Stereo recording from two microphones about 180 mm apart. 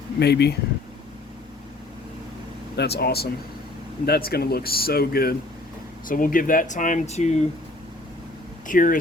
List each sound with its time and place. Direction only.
0.2 s speech: 65° left (ahead or behind)
2.7 s speech: 65° left (ahead or behind); by 7.4 s 40° left (ahead or behind)
8.6 s speech: 50° left (ahead or behind)